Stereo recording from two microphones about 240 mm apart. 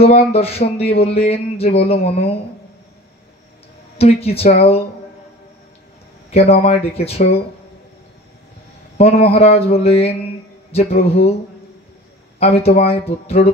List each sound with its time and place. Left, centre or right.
0.0 s speech: left
4.0 s speech: left
6.6 s speech: left
8.9 s speech: left
12.4 s speech: left